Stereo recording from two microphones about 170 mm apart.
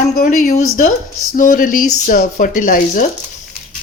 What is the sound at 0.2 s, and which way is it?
Speech, 45° left (ahead or behind).